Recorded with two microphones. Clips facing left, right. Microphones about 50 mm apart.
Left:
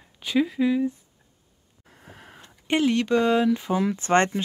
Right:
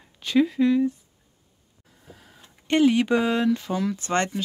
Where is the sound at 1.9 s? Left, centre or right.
Left.